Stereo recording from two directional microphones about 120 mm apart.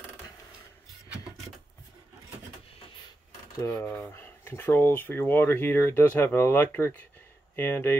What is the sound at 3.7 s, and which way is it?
Speech, 15° left (ahead or behind).